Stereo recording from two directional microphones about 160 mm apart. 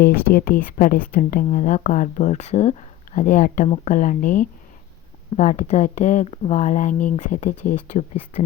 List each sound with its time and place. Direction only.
0.0 s speech: 65° left (ahead or behind)